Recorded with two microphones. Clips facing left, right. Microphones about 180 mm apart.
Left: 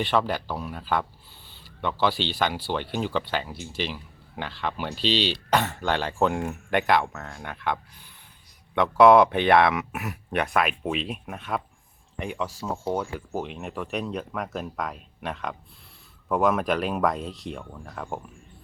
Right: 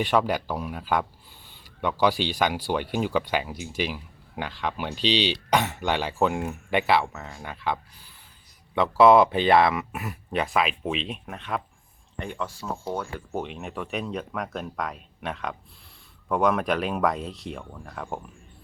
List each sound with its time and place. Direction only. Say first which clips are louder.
0.0 s speech: right 1 dB; 10° right (ahead or behind)
4.9 s speech: right 1 dB; 45° left (ahead or behind)
5.5 s speech: left 1 dB; 10° right (ahead or behind); by 12.5 s 5° left (ahead or behind)
12.5 s speech: left 5 dB; 20° left (ahead or behind)
13.1 s speech: even; centre (ahead or behind)